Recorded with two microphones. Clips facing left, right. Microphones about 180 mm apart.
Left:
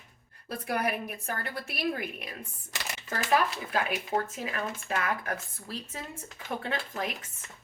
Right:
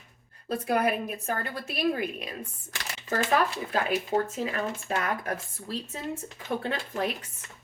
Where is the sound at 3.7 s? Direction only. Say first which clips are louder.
Right 3 dB; 35° right (ahead or behind).